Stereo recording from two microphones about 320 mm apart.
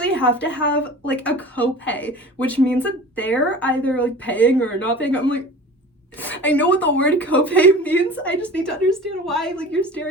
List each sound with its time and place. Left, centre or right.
0.0 s a sound: centre
0.4 s a woman's voice: left
0.8 s a woman's voice: centre
6.4 s a woman's voice: centre